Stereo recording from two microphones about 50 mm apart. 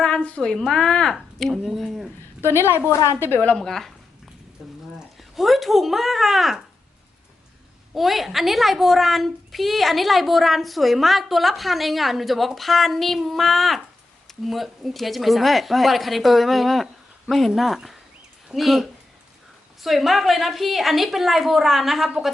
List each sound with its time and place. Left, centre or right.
0.0 s a sound: left
0.7 s speech: centre
1.1 s a woman's voice: centre
2.6 s speech: left
3.2 s speech: left
3.5 s speech: centre
4.6 s a sound: centre
4.9 s a woman's voice: centre
7.9 s a woman's voice: centre